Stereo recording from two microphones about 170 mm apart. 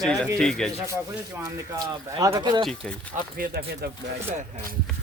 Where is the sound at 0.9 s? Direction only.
15° right (ahead or behind).